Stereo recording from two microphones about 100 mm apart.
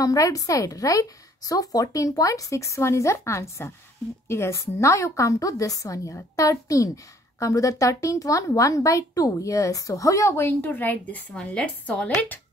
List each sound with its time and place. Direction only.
0.0 s speech: 35° left (ahead or behind); by 12.4 s 10° left (ahead or behind)